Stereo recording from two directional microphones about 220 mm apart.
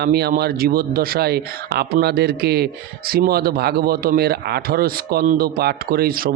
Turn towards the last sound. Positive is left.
turn(degrees=-40)  # may be behind; listen again after turning